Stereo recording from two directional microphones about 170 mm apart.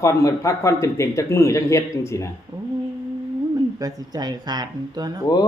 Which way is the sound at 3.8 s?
20° right (ahead or behind).